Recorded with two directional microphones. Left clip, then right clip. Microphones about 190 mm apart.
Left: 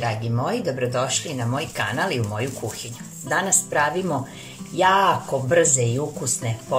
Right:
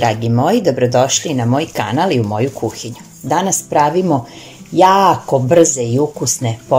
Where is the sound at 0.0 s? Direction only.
40° right (ahead or behind).